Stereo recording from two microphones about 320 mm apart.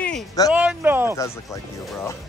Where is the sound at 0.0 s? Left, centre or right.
Centre.